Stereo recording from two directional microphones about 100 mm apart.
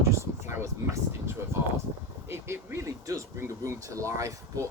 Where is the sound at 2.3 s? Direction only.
30° right (ahead or behind).